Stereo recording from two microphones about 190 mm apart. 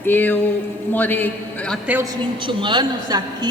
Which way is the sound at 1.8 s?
10° right (ahead or behind).